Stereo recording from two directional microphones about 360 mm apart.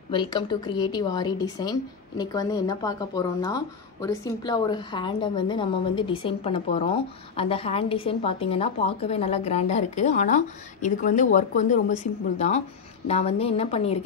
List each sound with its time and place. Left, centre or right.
0.1 s a woman's voice: centre